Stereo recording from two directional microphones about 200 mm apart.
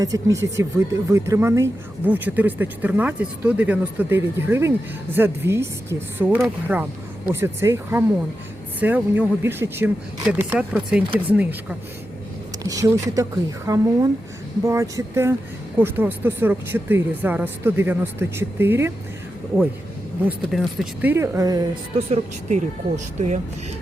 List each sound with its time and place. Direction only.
0.0 s speech: 15° right (ahead or behind)
20.2 s speech: centre (ahead or behind); by 21.6 s 15° right (ahead or behind)
21.9 s speech: 35° right (ahead or behind)